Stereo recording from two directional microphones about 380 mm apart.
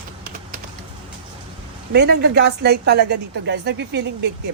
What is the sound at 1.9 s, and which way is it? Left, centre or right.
Speech, right.